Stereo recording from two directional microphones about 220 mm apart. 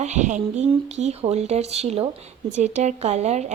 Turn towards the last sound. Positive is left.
turn(degrees=-30)  # may be behind; listen again after turning